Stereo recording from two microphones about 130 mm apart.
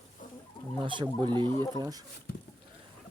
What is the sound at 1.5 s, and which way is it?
Speech, 20° left (ahead or behind).